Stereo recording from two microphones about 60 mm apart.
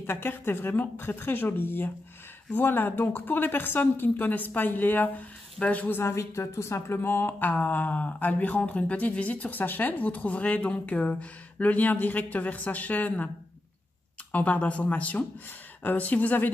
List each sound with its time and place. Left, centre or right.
0.0 s speech: left
5.9 s speech: left
7.0 s speech: left
14.3 s speech: left